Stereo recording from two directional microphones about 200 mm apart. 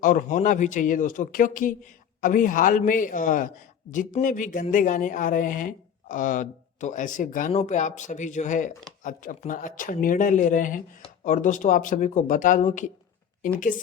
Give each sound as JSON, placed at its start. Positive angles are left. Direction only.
{"t": 0.0, "sound": "speech", "side_deg": 40}